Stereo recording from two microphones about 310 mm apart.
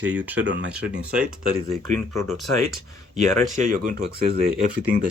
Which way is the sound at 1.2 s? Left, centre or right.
Right.